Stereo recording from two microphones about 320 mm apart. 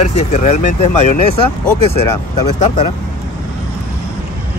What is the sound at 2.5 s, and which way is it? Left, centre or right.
Speech, left.